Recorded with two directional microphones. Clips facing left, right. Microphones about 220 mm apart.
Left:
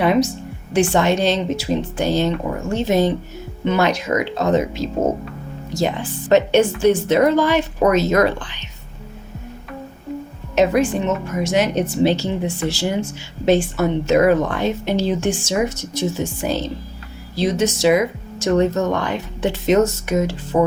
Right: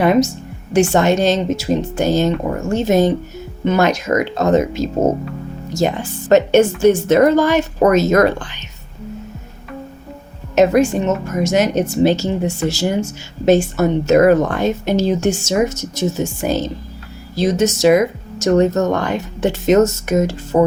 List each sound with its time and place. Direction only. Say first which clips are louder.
0.0 s speech: right 3 dB; 45° right (ahead or behind)
10.5 s speech: right 4 dB; 45° right (ahead or behind)